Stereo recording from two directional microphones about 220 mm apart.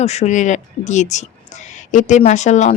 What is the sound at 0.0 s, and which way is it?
Speech, 30° left (ahead or behind).